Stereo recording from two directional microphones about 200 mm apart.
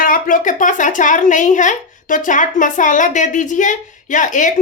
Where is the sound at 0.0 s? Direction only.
45° left (ahead or behind).